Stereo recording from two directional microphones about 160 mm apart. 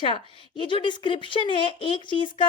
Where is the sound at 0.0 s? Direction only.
30° left (ahead or behind).